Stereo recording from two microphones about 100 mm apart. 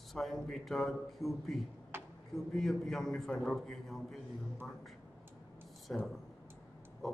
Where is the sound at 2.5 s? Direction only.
5° left (ahead or behind).